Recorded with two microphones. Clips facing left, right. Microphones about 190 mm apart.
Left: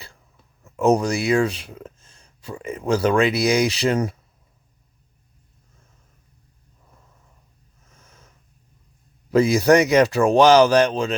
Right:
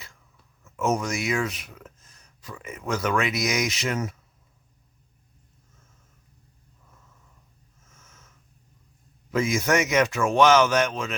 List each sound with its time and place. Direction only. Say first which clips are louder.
0.6 s speech: left 8 dB; 35° left (ahead or behind)
7.9 s a sound: left 3 dB; 35° left (ahead or behind)
9.3 s speech: left 8 dB; 35° left (ahead or behind)